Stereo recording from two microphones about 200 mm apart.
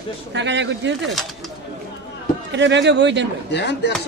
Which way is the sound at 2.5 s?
60° right (ahead or behind).